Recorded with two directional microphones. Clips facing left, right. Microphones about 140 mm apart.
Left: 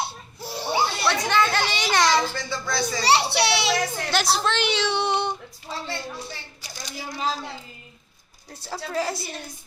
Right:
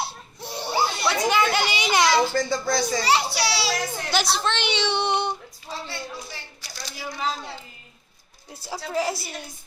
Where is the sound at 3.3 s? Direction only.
25° left (ahead or behind).